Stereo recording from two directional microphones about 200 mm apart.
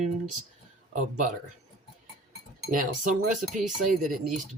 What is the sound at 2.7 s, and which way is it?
Speech, 40° right (ahead or behind).